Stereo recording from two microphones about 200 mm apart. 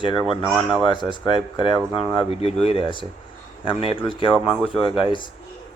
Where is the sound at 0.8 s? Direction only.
25° left (ahead or behind).